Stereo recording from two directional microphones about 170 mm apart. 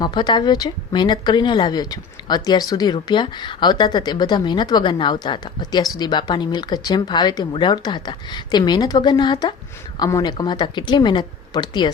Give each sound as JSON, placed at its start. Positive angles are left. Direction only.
{"t": 0.0, "sound": "speech", "side_deg": 25}